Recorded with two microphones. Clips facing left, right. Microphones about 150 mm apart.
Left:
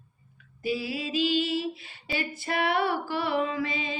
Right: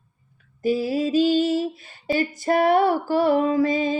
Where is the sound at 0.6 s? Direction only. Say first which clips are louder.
Right 9 dB; 45° right (ahead or behind).